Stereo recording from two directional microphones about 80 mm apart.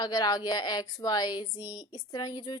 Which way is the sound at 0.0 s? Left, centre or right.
Left.